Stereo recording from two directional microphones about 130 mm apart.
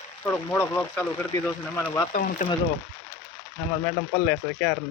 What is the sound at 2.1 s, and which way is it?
Speech, 90° left.